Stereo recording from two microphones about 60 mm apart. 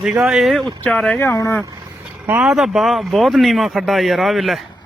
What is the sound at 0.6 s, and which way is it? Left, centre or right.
Speech, centre.